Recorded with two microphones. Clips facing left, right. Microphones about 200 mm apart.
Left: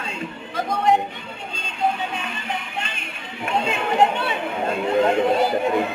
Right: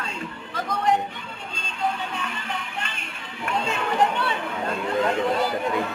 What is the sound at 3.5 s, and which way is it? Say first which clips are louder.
Chatter: left 3 dB; 25° left (ahead or behind).